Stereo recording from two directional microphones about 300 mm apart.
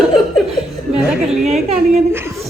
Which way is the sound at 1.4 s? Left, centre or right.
Right.